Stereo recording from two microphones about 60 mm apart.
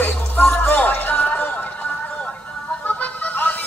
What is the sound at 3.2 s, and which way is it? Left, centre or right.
Music, left.